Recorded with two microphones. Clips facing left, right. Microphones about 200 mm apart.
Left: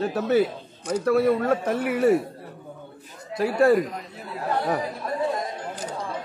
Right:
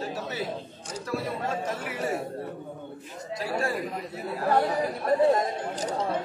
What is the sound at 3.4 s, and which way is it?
Speech, 60° left (ahead or behind).